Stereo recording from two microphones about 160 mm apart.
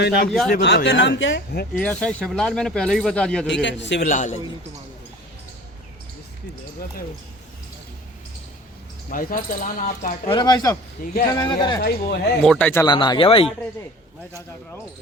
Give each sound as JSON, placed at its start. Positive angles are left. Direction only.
{"t": 0.3, "sound": "speech", "side_deg": 0}
{"t": 0.5, "sound": "speech", "side_deg": 80}
{"t": 1.8, "sound": "speech", "side_deg": 10}
{"t": 3.5, "sound": "speech", "side_deg": 90}
{"t": 4.0, "sound": "a man's voice", "side_deg": 50}
{"t": 9.0, "sound": "speech", "side_deg": 60}
{"t": 10.2, "sound": "speech", "side_deg": 30}
{"t": 11.8, "sound": "speech", "side_deg": 75}
{"t": 12.4, "sound": "a man's voice", "side_deg": 5}
{"t": 12.8, "sound": "speech", "side_deg": 25}